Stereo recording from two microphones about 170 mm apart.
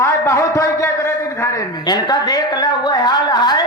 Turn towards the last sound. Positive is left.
turn(degrees=25)  # may be behind; listen again after turning